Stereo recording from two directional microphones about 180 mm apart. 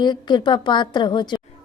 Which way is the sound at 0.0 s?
25° left (ahead or behind).